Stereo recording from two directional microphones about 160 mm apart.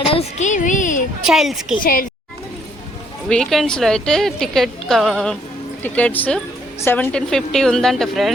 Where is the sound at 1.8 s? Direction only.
60° left (ahead or behind).